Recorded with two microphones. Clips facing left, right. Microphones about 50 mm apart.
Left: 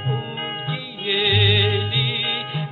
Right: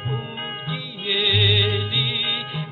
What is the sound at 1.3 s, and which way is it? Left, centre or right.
Music, centre.